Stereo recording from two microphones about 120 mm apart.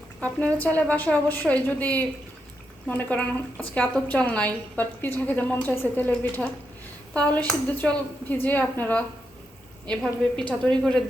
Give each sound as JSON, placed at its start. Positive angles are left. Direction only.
{"t": 0.2, "sound": "a woman's voice", "side_deg": 10}
{"t": 7.1, "sound": "a woman's voice", "side_deg": 10}